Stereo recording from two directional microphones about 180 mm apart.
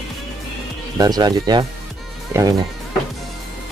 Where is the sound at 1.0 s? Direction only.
20° right (ahead or behind).